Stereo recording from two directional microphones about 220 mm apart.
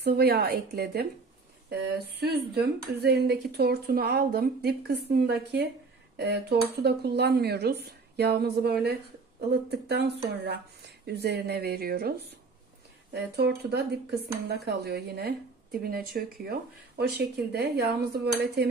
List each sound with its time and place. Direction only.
0.0 s speech: 45° right (ahead or behind)